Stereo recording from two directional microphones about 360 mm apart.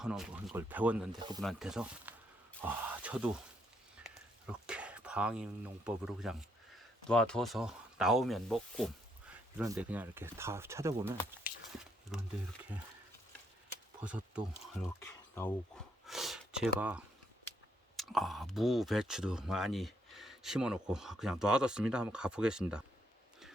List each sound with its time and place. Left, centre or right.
0.0 s speech: centre
1.4 s speech: centre
4.0 s a sound: centre
6.7 s speech: centre
11.5 s a sound: left
12.1 s speech: centre
14.0 s speech: centre
16.0 s a sound: centre
17.9 s speech: centre